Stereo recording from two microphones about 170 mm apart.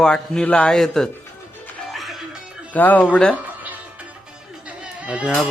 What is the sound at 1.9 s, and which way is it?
Music, centre (ahead or behind).